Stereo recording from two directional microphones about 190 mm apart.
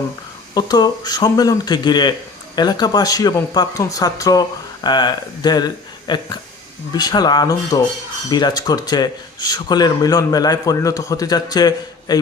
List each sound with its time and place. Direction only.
0.5 s speech: 20° left (ahead or behind)